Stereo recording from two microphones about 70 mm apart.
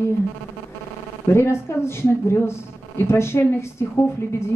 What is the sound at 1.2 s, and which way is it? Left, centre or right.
Speech, left.